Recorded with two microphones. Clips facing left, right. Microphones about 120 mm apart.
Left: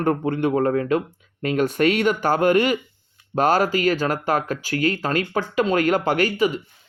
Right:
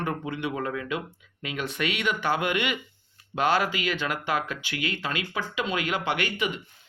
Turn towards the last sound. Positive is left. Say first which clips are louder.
# left 8 dB
turn(degrees=40)  # may be behind; listen again after turning